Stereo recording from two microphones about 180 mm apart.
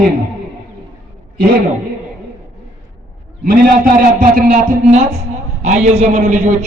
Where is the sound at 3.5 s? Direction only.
50° right (ahead or behind).